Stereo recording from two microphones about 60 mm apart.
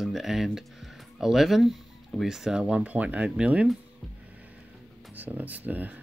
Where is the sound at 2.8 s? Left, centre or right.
Right.